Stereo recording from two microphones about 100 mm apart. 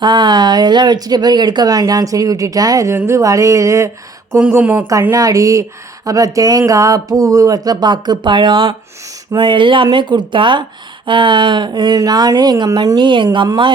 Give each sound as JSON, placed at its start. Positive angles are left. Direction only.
{"t": 0.0, "sound": "speech", "side_deg": -50}
{"t": 5.1, "sound": "speech", "side_deg": -35}